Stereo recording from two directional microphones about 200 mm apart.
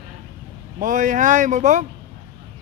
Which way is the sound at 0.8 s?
40° right (ahead or behind).